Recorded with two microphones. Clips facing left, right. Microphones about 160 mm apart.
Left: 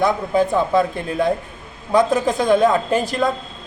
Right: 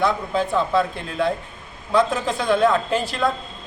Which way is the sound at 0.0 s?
15° left (ahead or behind).